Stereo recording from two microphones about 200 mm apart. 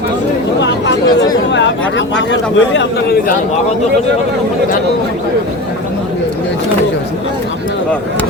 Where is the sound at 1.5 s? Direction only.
65° left (ahead or behind).